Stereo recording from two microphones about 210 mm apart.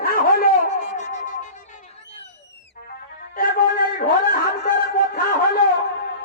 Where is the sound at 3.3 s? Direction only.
40° left (ahead or behind).